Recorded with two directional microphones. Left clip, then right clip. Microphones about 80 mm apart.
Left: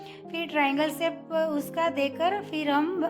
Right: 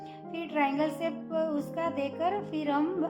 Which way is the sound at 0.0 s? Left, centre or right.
Left.